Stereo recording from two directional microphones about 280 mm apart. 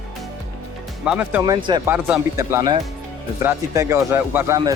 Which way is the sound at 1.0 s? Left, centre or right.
Centre.